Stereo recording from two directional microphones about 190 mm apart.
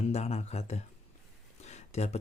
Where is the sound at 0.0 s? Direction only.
35° left (ahead or behind).